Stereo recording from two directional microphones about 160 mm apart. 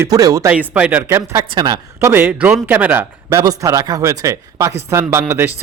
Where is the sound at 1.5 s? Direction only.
25° right (ahead or behind).